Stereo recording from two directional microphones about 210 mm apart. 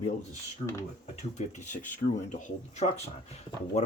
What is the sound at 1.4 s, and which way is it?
Speech, 35° left (ahead or behind).